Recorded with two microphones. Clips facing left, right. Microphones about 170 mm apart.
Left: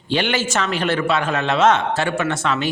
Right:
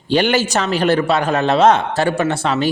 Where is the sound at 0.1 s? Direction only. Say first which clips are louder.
Right 5 dB; 40° right (ahead or behind).